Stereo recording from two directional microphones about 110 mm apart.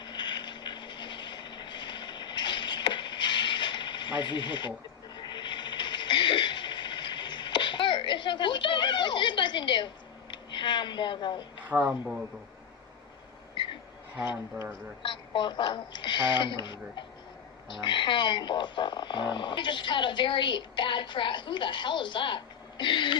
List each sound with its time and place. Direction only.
0.0 s vehicle: 45° left (ahead or behind)
5.1 s a sound: 45° left (ahead or behind)
10.3 s speech: 45° left (ahead or behind)
11.6 s speech: 15° right (ahead or behind)
15.0 s a woman's voice: 45° left (ahead or behind)